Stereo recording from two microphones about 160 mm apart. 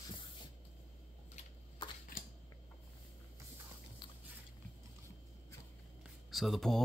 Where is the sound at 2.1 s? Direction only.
60° left (ahead or behind).